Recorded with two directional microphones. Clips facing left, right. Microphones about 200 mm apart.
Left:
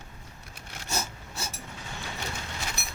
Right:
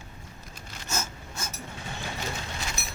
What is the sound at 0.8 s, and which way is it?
Wood, 35° left (ahead or behind).